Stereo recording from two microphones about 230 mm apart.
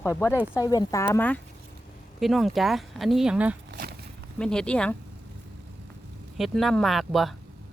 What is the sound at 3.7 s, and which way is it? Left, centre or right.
Walk, right.